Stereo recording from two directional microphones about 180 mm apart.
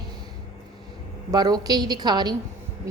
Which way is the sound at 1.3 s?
20° right (ahead or behind).